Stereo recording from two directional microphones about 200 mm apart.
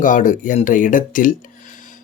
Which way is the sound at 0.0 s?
40° left (ahead or behind).